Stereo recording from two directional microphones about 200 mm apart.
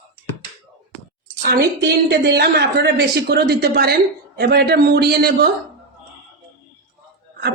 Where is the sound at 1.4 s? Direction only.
50° right (ahead or behind).